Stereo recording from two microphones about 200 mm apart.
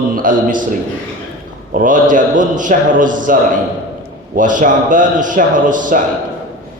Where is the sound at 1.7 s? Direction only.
40° right (ahead or behind).